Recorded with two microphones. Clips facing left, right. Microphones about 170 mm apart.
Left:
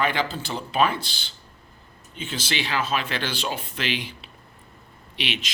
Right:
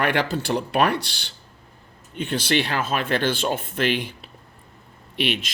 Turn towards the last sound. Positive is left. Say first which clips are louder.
# right 6 dB
turn(degrees=-50)  # may be behind; listen again after turning